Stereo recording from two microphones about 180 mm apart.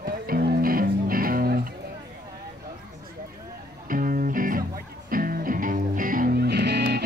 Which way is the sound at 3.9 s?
50° right (ahead or behind).